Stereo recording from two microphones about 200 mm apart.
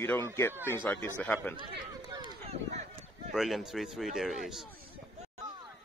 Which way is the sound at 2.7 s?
35° right (ahead or behind).